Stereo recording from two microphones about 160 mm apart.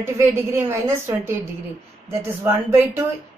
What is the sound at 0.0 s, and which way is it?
A woman's voice, 15° right (ahead or behind).